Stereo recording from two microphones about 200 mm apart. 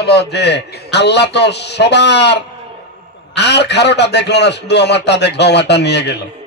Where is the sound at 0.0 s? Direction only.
55° left (ahead or behind).